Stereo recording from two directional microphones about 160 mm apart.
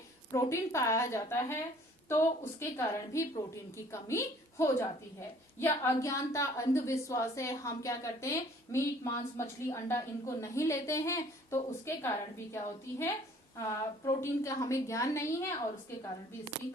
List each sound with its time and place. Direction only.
0.3 s a woman's voice: 20° left (ahead or behind)